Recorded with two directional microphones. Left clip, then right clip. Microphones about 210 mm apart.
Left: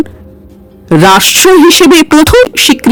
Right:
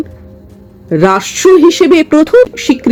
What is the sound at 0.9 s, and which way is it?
Speech, 45° left (ahead or behind).